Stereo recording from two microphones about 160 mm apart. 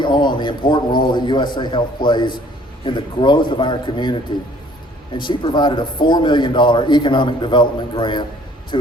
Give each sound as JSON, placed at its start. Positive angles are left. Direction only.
{"t": 0.0, "sound": "a man's voice", "side_deg": 30}